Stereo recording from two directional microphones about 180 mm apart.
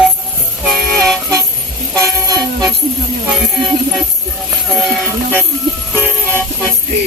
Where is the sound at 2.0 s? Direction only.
20° right (ahead or behind).